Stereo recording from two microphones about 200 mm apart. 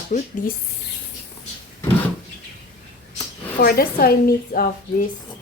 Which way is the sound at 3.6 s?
50° left (ahead or behind).